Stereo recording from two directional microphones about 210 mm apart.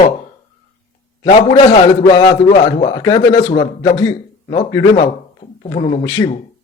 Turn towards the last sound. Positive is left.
turn(degrees=15)  # may be behind; listen again after turning